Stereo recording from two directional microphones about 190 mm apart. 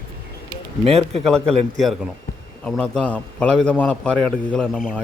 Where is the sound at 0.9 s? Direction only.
35° right (ahead or behind).